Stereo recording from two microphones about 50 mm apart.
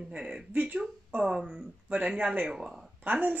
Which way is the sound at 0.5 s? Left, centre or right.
Right.